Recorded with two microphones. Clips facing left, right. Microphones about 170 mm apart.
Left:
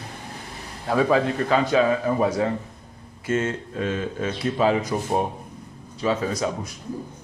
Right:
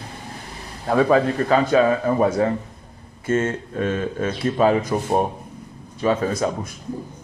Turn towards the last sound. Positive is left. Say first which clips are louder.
# right 3 dB
turn(degrees=-50)  # may be behind; listen again after turning